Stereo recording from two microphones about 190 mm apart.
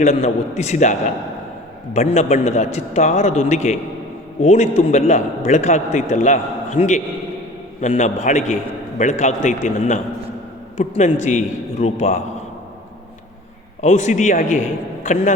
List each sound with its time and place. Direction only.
0.0 s a man's voice: 35° left (ahead or behind)
13.8 s a man's voice: 40° left (ahead or behind)